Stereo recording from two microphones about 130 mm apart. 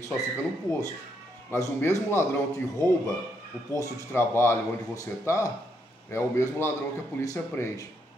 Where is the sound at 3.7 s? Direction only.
20° left (ahead or behind).